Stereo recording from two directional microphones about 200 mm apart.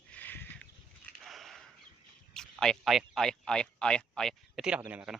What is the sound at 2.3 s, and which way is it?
A man's voice, 5° left (ahead or behind).